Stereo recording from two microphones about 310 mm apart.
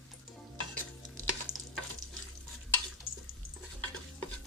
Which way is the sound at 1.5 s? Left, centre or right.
Centre.